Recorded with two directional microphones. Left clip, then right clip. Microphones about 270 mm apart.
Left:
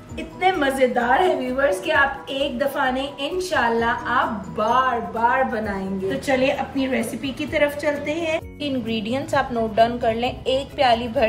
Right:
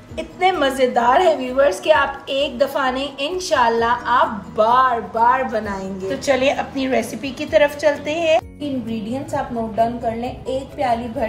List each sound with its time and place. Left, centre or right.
0.4 s a woman's voice: centre
9.1 s a woman's voice: centre